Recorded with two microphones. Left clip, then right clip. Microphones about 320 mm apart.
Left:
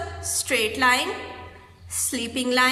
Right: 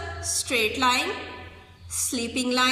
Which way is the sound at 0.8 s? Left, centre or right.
Left.